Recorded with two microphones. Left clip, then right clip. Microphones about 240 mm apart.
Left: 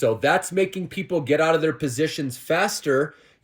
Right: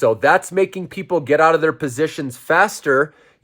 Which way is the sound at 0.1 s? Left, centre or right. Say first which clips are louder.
Right 6 dB; right.